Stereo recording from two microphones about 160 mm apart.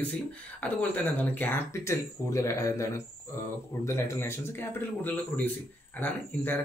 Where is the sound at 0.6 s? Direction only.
10° left (ahead or behind).